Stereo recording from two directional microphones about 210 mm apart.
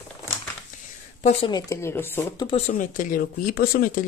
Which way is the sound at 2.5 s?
35° left (ahead or behind).